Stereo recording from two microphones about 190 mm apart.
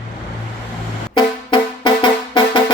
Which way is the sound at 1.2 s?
25° left (ahead or behind).